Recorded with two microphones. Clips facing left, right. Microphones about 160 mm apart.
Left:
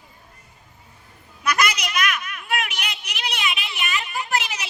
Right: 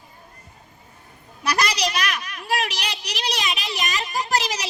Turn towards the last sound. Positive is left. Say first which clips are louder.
# right 2 dB
turn(degrees=-35)  # may be behind; listen again after turning